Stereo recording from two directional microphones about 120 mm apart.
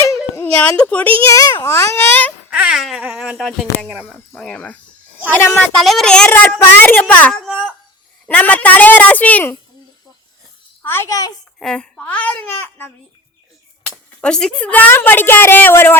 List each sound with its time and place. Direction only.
0.0 s a sound: 25° left (ahead or behind)
0.5 s speech: 10° left (ahead or behind)
1.3 s a child's voice: 30° left (ahead or behind)
1.6 s speech: 20° left (ahead or behind)
2.5 s speech: 5° right (ahead or behind)
4.4 s speech: 5° left (ahead or behind)
5.3 s speech: 20° left (ahead or behind)
5.7 s speech: 5° left (ahead or behind)
10.8 s speech: 20° left (ahead or behind)
11.6 s speech: 5° left (ahead or behind)
13.8 s speech: 5° left (ahead or behind)